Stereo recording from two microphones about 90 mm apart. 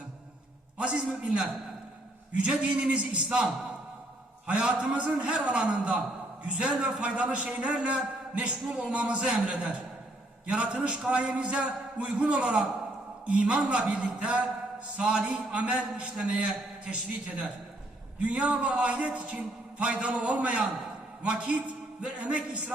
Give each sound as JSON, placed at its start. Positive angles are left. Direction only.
{"t": 0.8, "sound": "a man's voice", "side_deg": -10}
{"t": 4.4, "sound": "a man's voice", "side_deg": -15}